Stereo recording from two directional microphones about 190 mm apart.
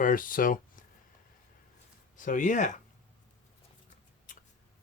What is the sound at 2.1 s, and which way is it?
Speech, 45° left (ahead or behind).